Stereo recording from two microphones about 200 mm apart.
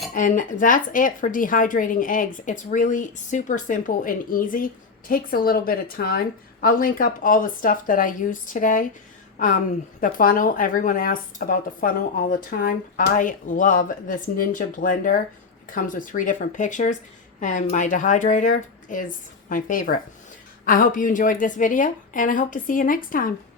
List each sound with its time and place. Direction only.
0.1 s speech: 40° left (ahead or behind)
10.0 s a woman's voice: 45° left (ahead or behind)